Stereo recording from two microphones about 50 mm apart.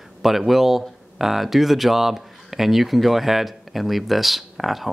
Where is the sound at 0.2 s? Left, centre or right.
Centre.